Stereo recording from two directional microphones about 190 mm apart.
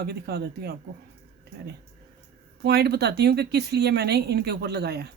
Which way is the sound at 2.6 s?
60° right (ahead or behind).